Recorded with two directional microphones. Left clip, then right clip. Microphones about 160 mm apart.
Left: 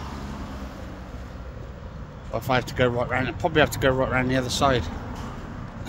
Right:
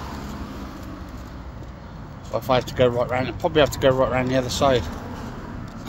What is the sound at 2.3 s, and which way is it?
Speech, 10° left (ahead or behind).